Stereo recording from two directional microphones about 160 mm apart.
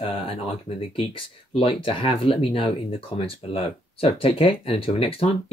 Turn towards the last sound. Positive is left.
turn(degrees=35)  # may be behind; listen again after turning